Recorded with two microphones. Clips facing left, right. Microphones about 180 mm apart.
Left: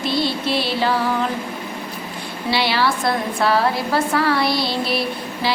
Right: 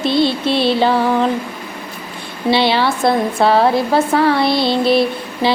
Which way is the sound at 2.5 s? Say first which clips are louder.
Right 5 dB; 25° right (ahead or behind).